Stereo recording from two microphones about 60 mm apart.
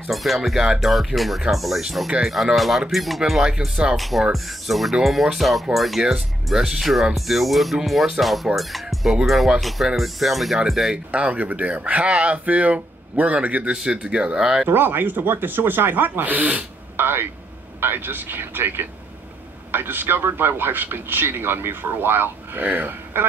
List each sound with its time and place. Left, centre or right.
0.1 s speech: centre
3.9 s speech: centre
11.1 s speech: right
14.7 s a man's voice: right